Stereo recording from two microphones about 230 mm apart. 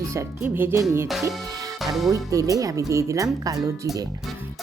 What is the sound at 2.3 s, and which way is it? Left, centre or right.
Speech, centre.